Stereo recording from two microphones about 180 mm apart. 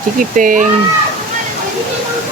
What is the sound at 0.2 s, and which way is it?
Speech, 50° right (ahead or behind).